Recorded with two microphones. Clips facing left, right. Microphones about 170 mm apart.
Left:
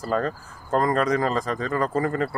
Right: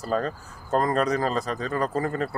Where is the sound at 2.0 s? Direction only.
20° right (ahead or behind).